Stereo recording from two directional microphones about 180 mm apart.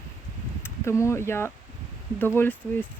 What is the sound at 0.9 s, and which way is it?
Speech, 15° left (ahead or behind).